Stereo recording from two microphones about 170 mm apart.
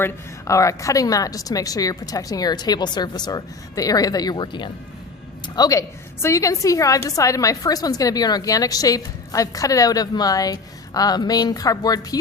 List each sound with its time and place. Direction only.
0.0 s a woman's voice: 20° left (ahead or behind)